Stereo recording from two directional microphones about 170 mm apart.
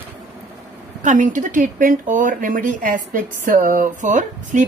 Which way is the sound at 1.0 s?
45° right (ahead or behind).